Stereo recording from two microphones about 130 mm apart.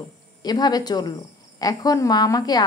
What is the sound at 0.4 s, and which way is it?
A woman's voice, 30° left (ahead or behind).